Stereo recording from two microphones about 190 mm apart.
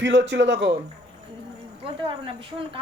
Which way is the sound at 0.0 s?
70° right (ahead or behind).